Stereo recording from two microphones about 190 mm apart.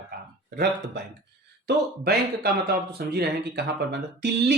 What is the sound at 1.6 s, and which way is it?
Speech, 55° right (ahead or behind).